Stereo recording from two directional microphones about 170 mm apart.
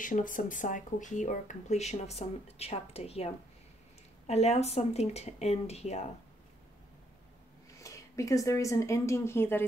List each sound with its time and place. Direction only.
0.0 s speech: 50° left (ahead or behind)
7.8 s speech: 20° left (ahead or behind)